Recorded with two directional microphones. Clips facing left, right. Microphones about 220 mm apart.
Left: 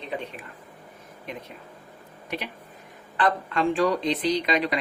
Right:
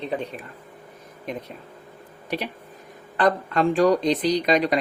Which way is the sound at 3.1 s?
40° right (ahead or behind).